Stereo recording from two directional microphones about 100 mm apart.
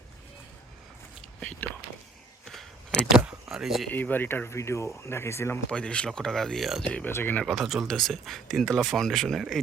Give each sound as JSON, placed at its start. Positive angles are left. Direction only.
{"t": 1.4, "sound": "speech", "side_deg": 10}
{"t": 3.2, "sound": "vehicle", "side_deg": -5}
{"t": 3.9, "sound": "speech", "side_deg": 20}
{"t": 5.7, "sound": "speech", "side_deg": 10}
{"t": 6.8, "sound": "speech", "side_deg": 15}
{"t": 7.4, "sound": "speech", "side_deg": 0}